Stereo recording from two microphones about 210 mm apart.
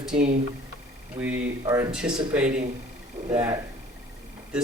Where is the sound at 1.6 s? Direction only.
20° right (ahead or behind).